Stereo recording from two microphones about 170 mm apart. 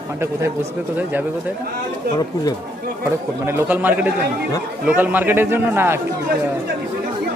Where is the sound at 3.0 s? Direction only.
10° right (ahead or behind).